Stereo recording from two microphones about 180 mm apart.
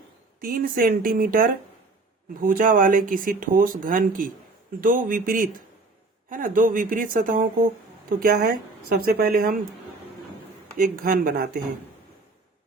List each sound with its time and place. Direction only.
0.4 s speech: 50° right (ahead or behind)
10.8 s speech: 50° right (ahead or behind)